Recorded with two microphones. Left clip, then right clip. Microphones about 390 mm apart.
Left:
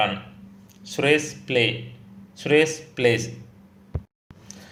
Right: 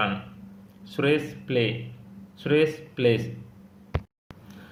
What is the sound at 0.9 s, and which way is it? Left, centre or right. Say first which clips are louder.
Speech: left 4 dB; centre.